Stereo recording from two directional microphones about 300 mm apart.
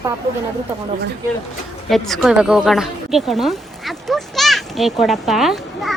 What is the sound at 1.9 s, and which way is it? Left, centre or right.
A woman's voice, centre.